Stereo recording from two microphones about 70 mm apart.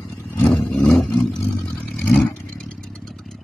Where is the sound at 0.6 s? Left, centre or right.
Centre.